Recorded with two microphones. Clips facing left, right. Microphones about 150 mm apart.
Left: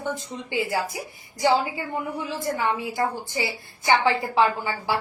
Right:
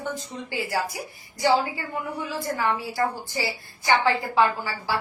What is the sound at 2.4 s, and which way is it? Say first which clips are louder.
A woman's voice: even; 20° left (ahead or behind).